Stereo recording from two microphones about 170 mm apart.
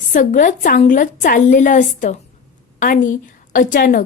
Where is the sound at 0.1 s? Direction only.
50° left (ahead or behind).